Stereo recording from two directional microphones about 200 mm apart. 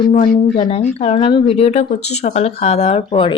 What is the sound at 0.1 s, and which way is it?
Speech, 40° left (ahead or behind).